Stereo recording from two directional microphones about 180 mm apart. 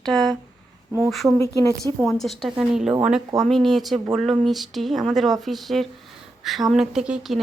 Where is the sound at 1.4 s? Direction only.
15° left (ahead or behind).